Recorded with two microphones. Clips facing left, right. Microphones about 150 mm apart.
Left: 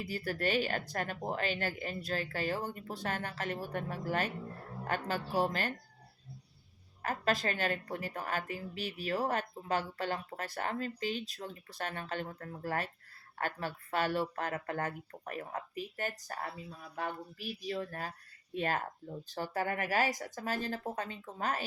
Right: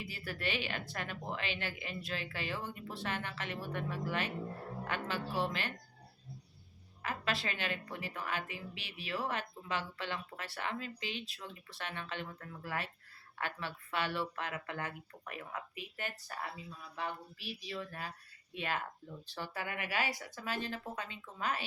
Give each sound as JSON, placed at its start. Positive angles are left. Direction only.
{"t": 0.0, "sound": "speech", "side_deg": 40}
{"t": 7.0, "sound": "a woman's voice", "side_deg": 45}